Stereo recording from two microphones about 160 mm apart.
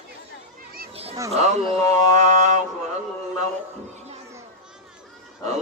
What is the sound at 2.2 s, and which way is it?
Speech, 45° right (ahead or behind).